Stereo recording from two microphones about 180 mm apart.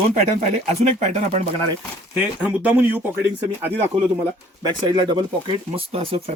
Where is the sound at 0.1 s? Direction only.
40° right (ahead or behind).